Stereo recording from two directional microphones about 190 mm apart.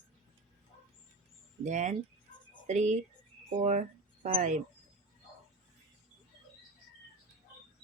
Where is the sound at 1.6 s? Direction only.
40° right (ahead or behind).